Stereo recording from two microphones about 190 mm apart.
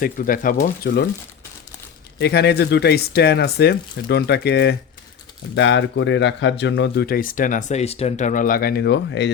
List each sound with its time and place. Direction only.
0.0 s speech: 45° left (ahead or behind)
2.1 s speech: 60° left (ahead or behind)
5.5 s speech: 75° left (ahead or behind)